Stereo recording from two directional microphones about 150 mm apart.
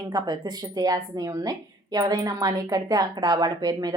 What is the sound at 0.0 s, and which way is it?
Speech, 30° right (ahead or behind).